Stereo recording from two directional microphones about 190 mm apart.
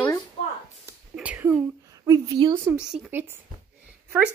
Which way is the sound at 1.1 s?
5° right (ahead or behind).